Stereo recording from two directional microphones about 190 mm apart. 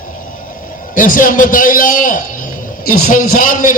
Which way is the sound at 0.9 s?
45° left (ahead or behind).